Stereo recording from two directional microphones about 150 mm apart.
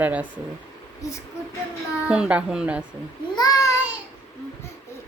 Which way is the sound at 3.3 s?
25° left (ahead or behind).